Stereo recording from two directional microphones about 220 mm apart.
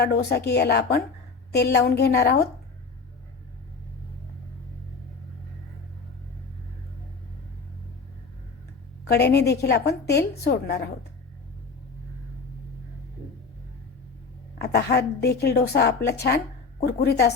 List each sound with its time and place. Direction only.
0.0 s a woman's voice: 45° left (ahead or behind)
9.0 s a woman's voice: 45° left (ahead or behind)
14.6 s a woman's voice: 50° left (ahead or behind)